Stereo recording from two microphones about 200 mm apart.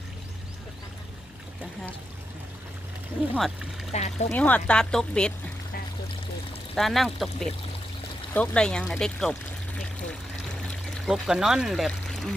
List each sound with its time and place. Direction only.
3.3 s speech: centre (ahead or behind)
3.9 s speech: 35° left (ahead or behind)
4.3 s speech: 10° left (ahead or behind)
6.7 s speech: centre (ahead or behind)
10.7 s pour: centre (ahead or behind)